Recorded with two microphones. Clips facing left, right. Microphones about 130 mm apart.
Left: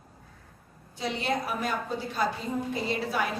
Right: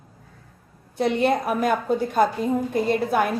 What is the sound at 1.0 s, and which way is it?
A woman's voice, 55° right (ahead or behind).